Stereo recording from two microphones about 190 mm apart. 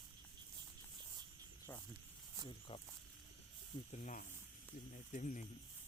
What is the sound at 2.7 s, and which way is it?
Speech, 30° left (ahead or behind).